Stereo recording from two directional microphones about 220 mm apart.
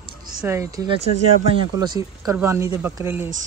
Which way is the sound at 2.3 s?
15° right (ahead or behind).